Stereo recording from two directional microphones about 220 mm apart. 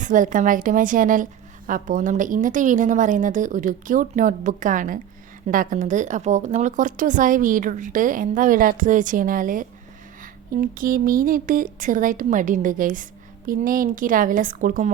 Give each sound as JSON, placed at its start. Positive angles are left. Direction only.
{"t": 0.0, "sound": "a woman's voice", "side_deg": -35}